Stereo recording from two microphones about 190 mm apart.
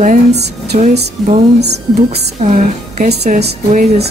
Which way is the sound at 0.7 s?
45° right (ahead or behind).